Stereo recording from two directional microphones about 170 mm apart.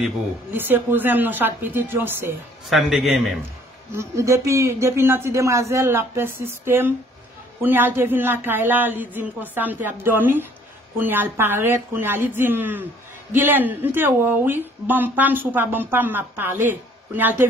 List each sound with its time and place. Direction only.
0.0 s speech: 10° right (ahead or behind)
2.7 s a man's voice: centre (ahead or behind)
3.9 s speech: 15° right (ahead or behind)